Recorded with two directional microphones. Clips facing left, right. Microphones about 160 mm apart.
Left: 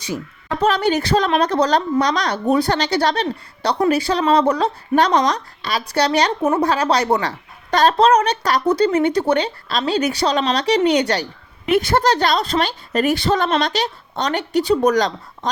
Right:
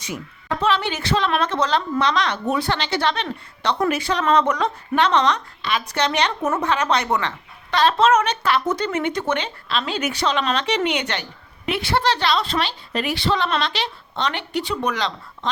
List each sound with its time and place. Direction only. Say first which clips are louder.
0.6 s a woman's voice: left 5 dB; 40° left (ahead or behind)